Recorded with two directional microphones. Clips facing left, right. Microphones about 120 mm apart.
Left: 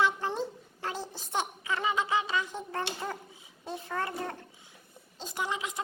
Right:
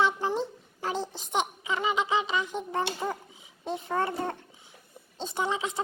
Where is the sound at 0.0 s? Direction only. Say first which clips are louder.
Right 2 dB; 20° right (ahead or behind).